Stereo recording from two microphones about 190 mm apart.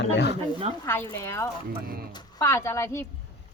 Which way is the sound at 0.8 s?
10° left (ahead or behind).